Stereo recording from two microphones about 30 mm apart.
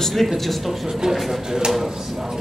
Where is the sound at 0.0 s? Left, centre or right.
Centre.